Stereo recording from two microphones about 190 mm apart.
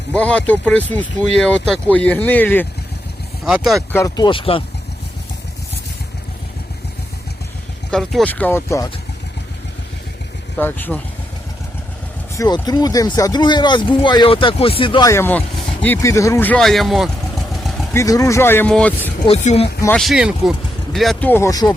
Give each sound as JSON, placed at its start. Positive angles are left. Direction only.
{"t": 0.1, "sound": "speech", "side_deg": 5}
{"t": 3.4, "sound": "speech", "side_deg": 0}
{"t": 3.9, "sound": "speech", "side_deg": 20}
{"t": 7.9, "sound": "speech", "side_deg": 5}
{"t": 10.6, "sound": "speech", "side_deg": 10}
{"t": 12.4, "sound": "speech", "side_deg": 20}
{"t": 15.1, "sound": "speech", "side_deg": 10}
{"t": 17.9, "sound": "speech", "side_deg": 15}
{"t": 19.3, "sound": "speech", "side_deg": 35}
{"t": 20.0, "sound": "speech", "side_deg": 0}